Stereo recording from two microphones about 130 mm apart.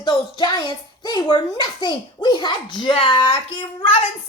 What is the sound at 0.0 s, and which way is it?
A child's voice, 35° left (ahead or behind).